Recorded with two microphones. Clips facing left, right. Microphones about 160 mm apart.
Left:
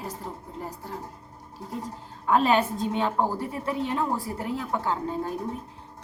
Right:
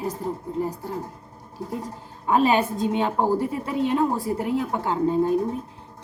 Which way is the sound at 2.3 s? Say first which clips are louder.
Right 2 dB; 10° right (ahead or behind).